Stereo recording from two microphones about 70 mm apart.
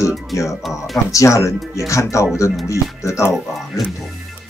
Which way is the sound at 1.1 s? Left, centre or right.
Left.